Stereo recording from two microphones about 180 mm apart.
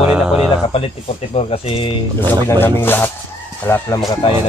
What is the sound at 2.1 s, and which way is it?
Speech, 15° left (ahead or behind).